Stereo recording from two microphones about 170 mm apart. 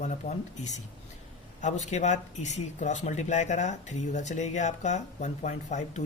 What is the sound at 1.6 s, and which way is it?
Speech, 45° left (ahead or behind).